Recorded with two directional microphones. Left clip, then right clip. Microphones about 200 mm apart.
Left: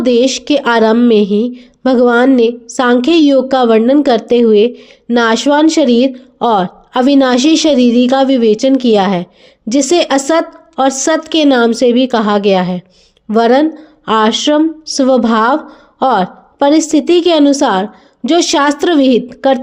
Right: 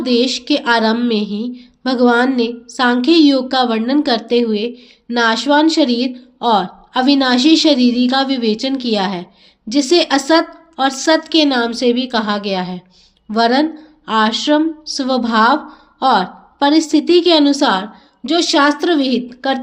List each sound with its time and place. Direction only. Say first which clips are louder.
0.0 s a woman's voice: left 5 dB; 45° left (ahead or behind)